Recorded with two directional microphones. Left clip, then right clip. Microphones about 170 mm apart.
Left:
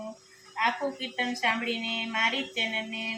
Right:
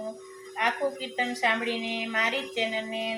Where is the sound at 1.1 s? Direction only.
20° right (ahead or behind).